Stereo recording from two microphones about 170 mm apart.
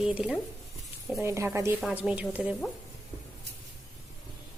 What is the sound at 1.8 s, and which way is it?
Speech, 5° right (ahead or behind).